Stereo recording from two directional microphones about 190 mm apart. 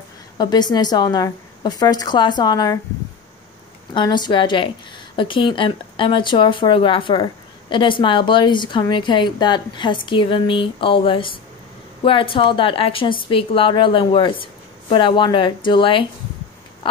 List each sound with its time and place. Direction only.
0.4 s a woman's voice: 20° left (ahead or behind)
3.9 s a woman's voice: 25° left (ahead or behind)
16.8 s a sound: 25° left (ahead or behind)